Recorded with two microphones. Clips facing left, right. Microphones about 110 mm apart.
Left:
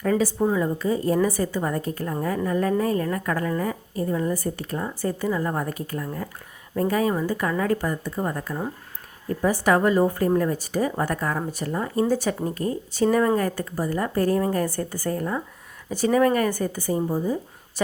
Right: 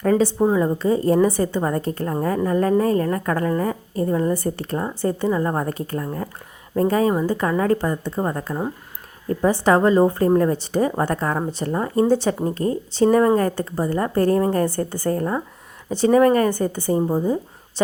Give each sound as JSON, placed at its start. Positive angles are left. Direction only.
{"t": 0.2, "sound": "a woman's voice", "side_deg": -30}
{"t": 1.6, "sound": "a woman's voice", "side_deg": -35}
{"t": 7.8, "sound": "a woman's voice", "side_deg": -25}
{"t": 12.0, "sound": "a woman's voice", "side_deg": -25}
{"t": 15.2, "sound": "a woman's voice", "side_deg": -40}
{"t": 16.6, "sound": "a woman's voice", "side_deg": -25}